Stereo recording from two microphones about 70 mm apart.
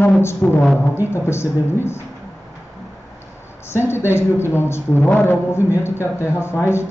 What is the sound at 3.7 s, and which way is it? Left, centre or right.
A man's voice, left.